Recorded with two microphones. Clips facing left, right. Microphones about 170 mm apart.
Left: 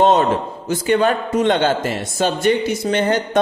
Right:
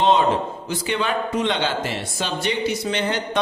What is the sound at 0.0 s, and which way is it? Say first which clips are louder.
A man's voice: left 3 dB; 45° left (ahead or behind).